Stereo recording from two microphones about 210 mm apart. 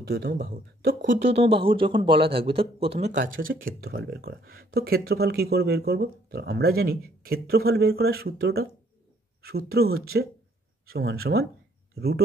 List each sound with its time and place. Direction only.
0.1 s speech: 50° right (ahead or behind)